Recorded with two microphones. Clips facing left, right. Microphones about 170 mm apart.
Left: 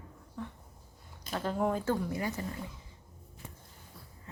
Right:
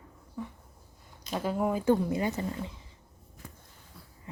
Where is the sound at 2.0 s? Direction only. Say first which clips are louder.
Right 5 dB; 20° right (ahead or behind).